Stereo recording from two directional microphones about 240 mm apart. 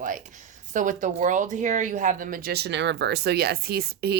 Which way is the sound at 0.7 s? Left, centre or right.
Right.